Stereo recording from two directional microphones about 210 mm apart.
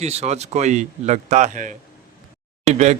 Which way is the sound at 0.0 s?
30° right (ahead or behind).